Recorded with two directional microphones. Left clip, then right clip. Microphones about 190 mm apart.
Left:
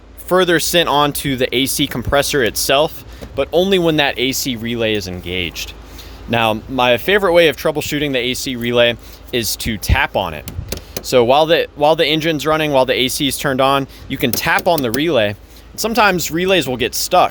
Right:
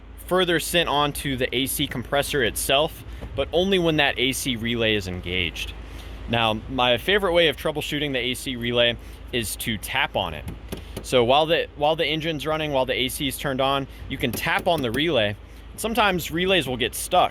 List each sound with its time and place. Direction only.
0.3 s speech: 40° left (ahead or behind)